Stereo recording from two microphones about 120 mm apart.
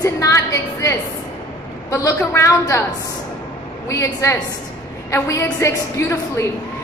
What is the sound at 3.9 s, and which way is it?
A woman's voice, 25° left (ahead or behind).